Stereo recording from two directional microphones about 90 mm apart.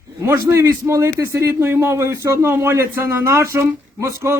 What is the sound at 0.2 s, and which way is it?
A man's voice, 30° right (ahead or behind).